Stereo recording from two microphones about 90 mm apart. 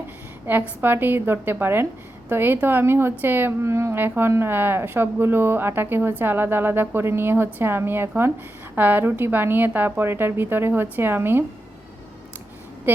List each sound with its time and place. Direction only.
0.8 s speech: 25° right (ahead or behind)